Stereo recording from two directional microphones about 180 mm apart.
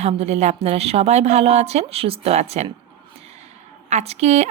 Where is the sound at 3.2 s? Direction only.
35° right (ahead or behind).